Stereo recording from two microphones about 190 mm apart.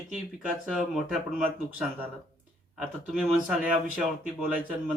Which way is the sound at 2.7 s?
5° right (ahead or behind).